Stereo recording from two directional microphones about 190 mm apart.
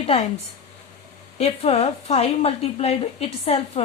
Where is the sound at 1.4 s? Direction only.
35° left (ahead or behind).